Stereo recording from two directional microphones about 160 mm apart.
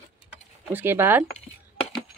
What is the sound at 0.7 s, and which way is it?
Speech, 15° right (ahead or behind).